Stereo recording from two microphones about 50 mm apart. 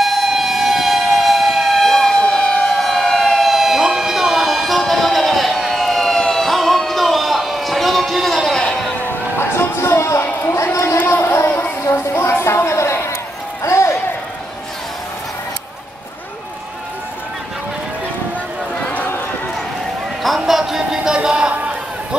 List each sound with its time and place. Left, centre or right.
0.0 s siren: centre
6.2 s music: centre
9.4 s a sound: left
11.1 s a sound: left
13.7 s music: left
20.3 s music: centre